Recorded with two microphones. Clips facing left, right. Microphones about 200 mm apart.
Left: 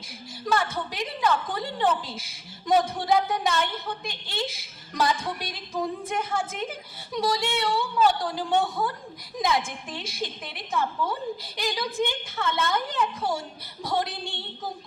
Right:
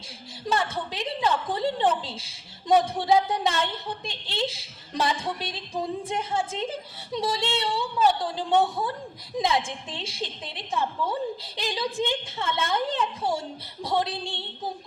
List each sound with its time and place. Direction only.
0.4 s a woman's voice: 25° right (ahead or behind)